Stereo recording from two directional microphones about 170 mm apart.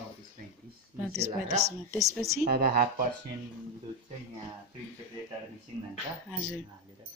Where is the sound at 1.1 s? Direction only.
40° right (ahead or behind).